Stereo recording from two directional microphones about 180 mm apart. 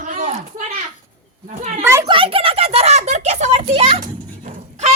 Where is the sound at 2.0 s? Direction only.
30° right (ahead or behind).